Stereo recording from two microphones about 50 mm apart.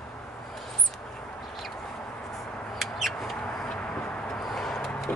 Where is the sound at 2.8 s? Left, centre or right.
Centre.